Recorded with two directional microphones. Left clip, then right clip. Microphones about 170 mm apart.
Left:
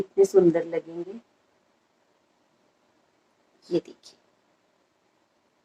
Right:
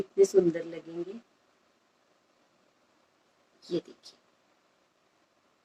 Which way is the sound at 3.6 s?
25° left (ahead or behind).